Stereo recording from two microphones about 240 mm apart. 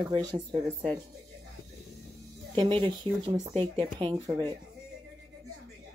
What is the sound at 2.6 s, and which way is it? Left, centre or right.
Speech, centre.